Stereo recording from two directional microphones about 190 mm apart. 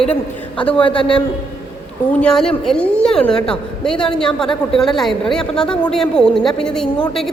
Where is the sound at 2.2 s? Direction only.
5° left (ahead or behind).